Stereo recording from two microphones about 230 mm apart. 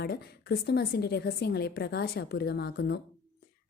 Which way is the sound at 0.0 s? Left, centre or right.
Left.